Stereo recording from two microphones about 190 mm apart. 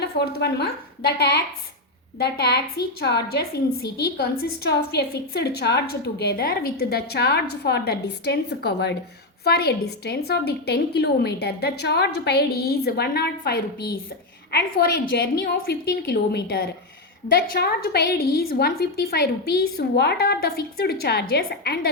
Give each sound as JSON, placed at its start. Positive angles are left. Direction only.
{"t": 0.0, "sound": "a woman's voice", "side_deg": 60}
{"t": 15.1, "sound": "a woman's voice", "side_deg": 55}